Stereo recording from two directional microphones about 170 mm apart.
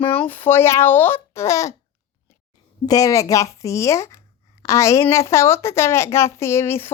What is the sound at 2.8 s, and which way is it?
A woman's voice, 20° left (ahead or behind).